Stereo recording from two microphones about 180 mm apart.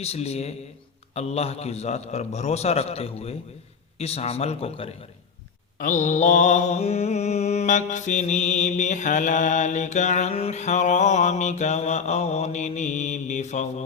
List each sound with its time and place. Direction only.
0.0 s mantra: 35° left (ahead or behind)